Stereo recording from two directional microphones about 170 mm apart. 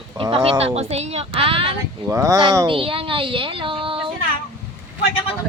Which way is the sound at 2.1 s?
20° right (ahead or behind).